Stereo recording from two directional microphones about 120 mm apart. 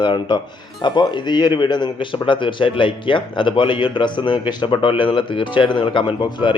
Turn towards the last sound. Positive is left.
turn(degrees=40)  # may be behind; listen again after turning